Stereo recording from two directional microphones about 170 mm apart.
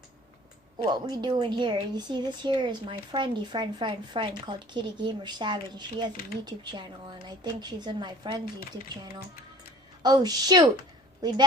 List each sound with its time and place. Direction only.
0.8 s a woman's voice: 25° right (ahead or behind)
10.0 s a woman's voice: 25° right (ahead or behind)